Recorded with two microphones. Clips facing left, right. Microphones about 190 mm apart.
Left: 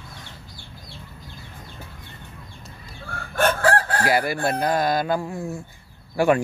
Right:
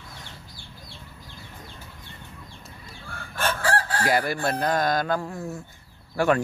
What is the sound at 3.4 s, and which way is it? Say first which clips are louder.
Chicken: left 6 dB; 60° left (ahead or behind).